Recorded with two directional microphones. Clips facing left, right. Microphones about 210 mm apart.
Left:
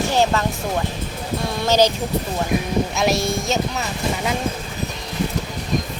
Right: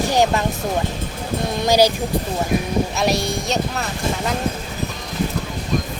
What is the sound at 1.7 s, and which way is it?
Speech, 10° right (ahead or behind).